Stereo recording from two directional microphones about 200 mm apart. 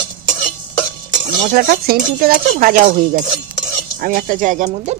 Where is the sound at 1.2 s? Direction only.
40° right (ahead or behind).